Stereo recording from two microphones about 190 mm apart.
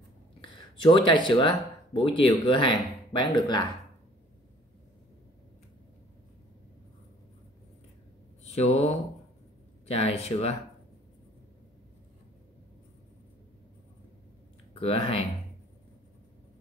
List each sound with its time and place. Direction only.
0.4 s speech: 25° left (ahead or behind)
8.5 s speech: 35° left (ahead or behind)
14.7 s speech: 30° left (ahead or behind)